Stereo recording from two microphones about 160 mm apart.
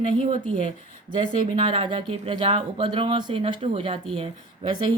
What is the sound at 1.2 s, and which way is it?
Speech, 30° right (ahead or behind).